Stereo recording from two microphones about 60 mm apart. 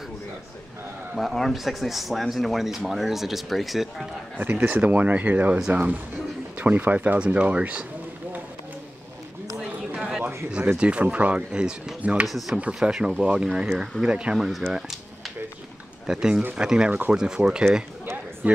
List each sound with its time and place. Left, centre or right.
1.1 s speech: centre
4.4 s speech: right
9.9 s a sound: centre
10.8 s speech: centre
12.3 s speech: centre
12.8 s speech: centre
14.7 s music: centre
16.1 s speech: centre
18.4 s speech: right